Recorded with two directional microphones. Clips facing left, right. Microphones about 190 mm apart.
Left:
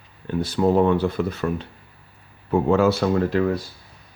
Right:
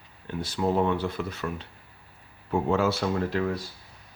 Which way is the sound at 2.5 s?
85° left.